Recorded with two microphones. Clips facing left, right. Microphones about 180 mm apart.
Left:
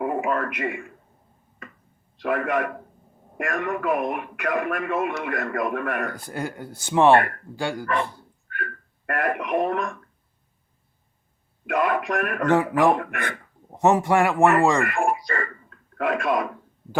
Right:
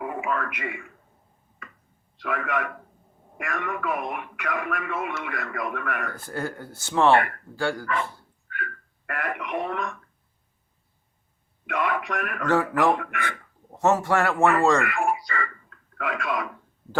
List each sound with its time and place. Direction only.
0.0 s a man's voice: 45° left (ahead or behind)
2.2 s speech: 45° left (ahead or behind)
6.1 s speech: 15° left (ahead or behind)
8.5 s speech: 45° left (ahead or behind)
11.6 s speech: 45° left (ahead or behind)
12.5 s speech: 15° left (ahead or behind)
13.0 s speech: 45° left (ahead or behind)
13.7 s speech: 15° left (ahead or behind)
14.8 s speech: 50° left (ahead or behind)